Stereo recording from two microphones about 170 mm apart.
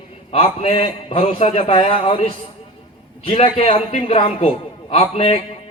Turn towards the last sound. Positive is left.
turn(degrees=35)  # may be behind; listen again after turning